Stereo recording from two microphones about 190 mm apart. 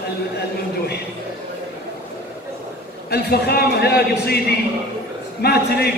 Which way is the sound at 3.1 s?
55° left (ahead or behind).